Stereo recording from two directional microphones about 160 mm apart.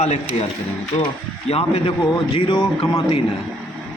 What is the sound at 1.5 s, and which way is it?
A man's voice, 35° left (ahead or behind).